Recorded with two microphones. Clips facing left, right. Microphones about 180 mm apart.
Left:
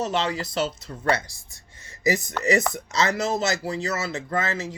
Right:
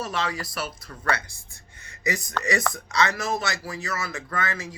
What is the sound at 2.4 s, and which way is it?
Speech, 25° left (ahead or behind).